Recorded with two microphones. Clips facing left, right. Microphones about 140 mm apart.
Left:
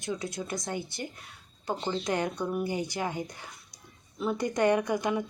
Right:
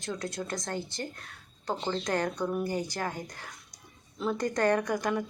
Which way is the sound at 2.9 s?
15° left (ahead or behind).